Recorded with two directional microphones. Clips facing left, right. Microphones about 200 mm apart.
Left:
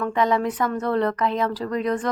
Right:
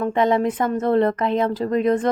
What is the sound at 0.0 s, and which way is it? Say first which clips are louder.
A woman's voice: right 3 dB; 25° right (ahead or behind).